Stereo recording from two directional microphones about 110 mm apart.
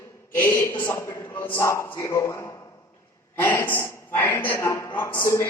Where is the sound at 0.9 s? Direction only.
20° left (ahead or behind).